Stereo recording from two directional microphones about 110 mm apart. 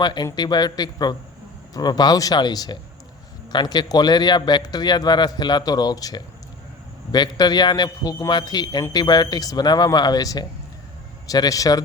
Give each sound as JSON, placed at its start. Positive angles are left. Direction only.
{"t": 0.0, "sound": "a man's voice", "side_deg": 40}